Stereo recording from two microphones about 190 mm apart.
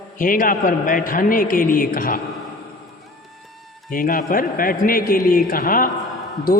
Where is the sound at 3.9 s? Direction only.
45° left (ahead or behind).